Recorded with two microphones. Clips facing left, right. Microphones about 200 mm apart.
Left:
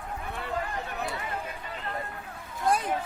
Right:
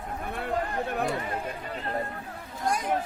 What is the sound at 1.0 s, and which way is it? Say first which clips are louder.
Speech: right 5 dB; 45° right (ahead or behind).